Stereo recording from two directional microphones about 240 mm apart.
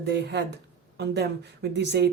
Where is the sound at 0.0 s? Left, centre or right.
Right.